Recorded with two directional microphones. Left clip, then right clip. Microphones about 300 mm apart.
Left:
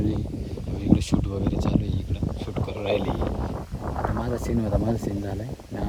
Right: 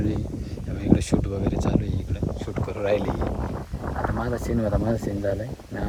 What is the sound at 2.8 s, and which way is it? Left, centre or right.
Speech, left.